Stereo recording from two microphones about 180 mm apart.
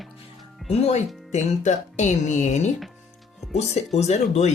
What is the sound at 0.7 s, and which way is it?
Speech, 35° left (ahead or behind).